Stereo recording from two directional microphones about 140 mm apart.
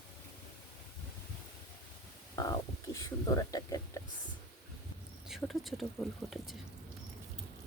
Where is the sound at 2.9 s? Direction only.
20° left (ahead or behind).